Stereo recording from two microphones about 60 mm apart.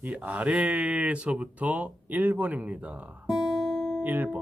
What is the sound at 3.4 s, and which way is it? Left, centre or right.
Guitar, centre.